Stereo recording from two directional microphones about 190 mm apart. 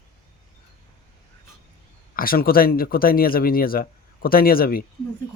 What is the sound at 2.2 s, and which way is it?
Speech, 50° left (ahead or behind).